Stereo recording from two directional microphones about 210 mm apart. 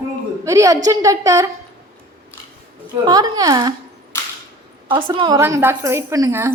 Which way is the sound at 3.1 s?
20° right (ahead or behind).